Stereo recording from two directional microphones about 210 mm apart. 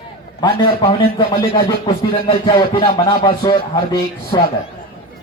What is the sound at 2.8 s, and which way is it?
A man's voice, 20° left (ahead or behind).